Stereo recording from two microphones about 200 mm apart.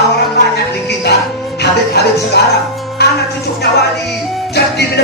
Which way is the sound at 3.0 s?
55° left (ahead or behind).